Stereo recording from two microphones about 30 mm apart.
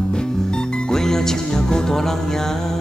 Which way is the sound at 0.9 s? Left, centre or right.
Centre.